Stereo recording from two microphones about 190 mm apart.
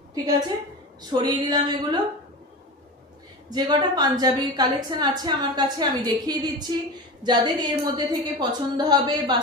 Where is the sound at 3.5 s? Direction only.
20° right (ahead or behind).